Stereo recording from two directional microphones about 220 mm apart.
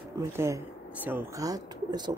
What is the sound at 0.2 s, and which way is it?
Speech, 15° right (ahead or behind).